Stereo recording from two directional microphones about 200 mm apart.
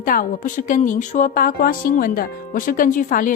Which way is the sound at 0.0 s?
45° left (ahead or behind).